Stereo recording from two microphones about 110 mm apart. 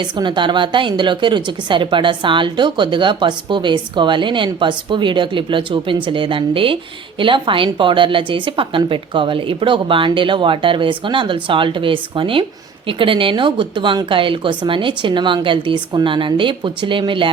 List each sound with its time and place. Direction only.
0.0 s a woman's voice: 45° right (ahead or behind)